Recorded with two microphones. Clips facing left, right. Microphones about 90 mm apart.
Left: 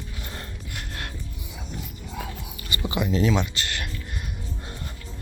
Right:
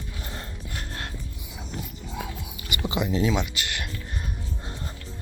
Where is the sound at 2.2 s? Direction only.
15° right (ahead or behind).